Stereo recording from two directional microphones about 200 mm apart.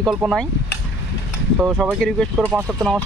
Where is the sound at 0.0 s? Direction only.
5° right (ahead or behind).